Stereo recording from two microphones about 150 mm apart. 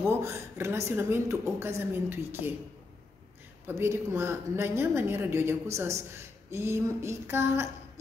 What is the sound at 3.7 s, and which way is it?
A woman's voice, 15° right (ahead or behind).